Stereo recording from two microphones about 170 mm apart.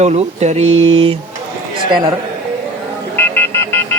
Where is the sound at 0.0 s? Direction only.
40° right (ahead or behind).